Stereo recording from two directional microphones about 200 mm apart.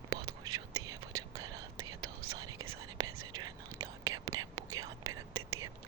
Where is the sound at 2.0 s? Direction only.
90° right.